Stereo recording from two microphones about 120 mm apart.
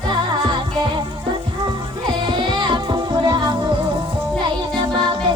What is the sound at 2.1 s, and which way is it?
Music, 40° right (ahead or behind).